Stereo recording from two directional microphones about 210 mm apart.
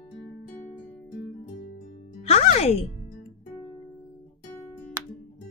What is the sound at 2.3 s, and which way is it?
Music, 30° left (ahead or behind).